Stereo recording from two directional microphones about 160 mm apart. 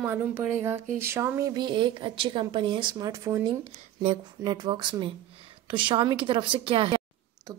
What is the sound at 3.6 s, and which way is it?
Speech, 40° right (ahead or behind).